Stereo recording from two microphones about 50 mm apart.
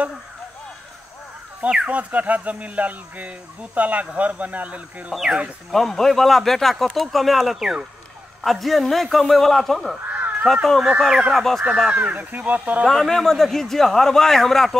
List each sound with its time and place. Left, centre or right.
1.6 s speech: right
5.1 s a man's voice: centre
5.7 s speech: centre
11.0 s speech: centre
11.3 s speech: centre
11.9 s speech: right
12.8 s a man's voice: centre